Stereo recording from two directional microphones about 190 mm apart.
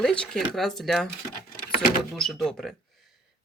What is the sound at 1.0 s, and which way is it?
Speech, 50° left (ahead or behind).